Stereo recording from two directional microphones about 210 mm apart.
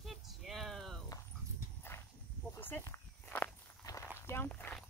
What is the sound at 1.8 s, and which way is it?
Horse, 10° left (ahead or behind).